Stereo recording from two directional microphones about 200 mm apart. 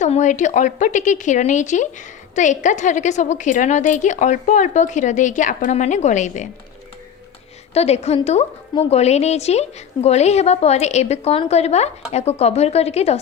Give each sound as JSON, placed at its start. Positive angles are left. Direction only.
{"t": 0.0, "sound": "speech", "side_deg": 35}
{"t": 7.7, "sound": "speech", "side_deg": 30}